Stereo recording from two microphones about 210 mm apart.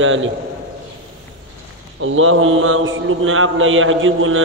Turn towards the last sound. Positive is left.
turn(degrees=-70)  # may be behind; listen again after turning